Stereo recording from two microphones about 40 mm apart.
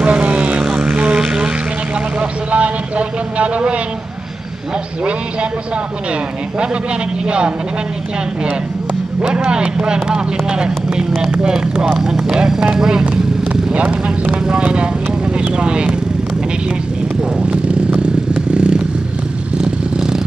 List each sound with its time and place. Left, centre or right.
0.0 s vehicle: right
0.7 s vehicle: centre
2.1 s a man's voice: right
7.2 s a man's voice: right
9.3 s a man's voice: right
13.7 s a man's voice: right
17.2 s vehicle: right